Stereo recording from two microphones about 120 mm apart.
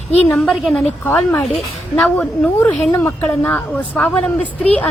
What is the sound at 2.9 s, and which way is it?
Speech, 15° left (ahead or behind).